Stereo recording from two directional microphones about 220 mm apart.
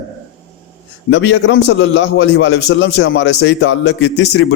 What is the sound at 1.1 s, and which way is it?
A man's voice, 55° left (ahead or behind).